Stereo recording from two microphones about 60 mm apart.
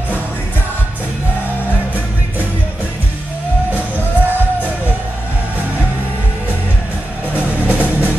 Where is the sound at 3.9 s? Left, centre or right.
Right.